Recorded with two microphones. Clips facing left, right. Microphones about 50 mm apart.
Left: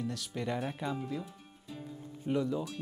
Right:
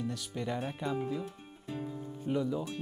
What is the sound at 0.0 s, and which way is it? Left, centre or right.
Speech, centre.